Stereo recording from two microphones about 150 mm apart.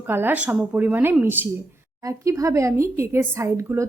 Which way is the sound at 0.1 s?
15° right (ahead or behind).